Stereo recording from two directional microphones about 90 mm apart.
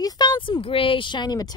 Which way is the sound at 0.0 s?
50° left (ahead or behind).